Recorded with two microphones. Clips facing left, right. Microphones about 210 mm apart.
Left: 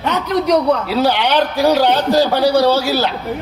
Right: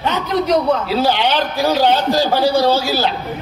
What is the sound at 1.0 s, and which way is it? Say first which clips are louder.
A man's voice: left 4 dB; 65° left (ahead or behind).